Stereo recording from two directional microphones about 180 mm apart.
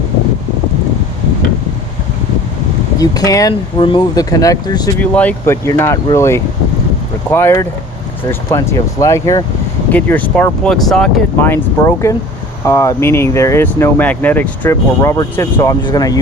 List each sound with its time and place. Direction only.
3.0 s speech: 20° left (ahead or behind)
4.9 s speech: 10° left (ahead or behind)